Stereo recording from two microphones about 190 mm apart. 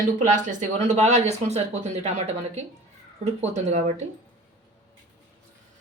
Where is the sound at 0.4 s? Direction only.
40° right (ahead or behind).